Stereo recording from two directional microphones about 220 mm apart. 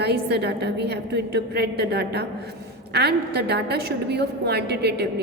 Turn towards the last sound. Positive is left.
turn(degrees=-50)  # may be behind; listen again after turning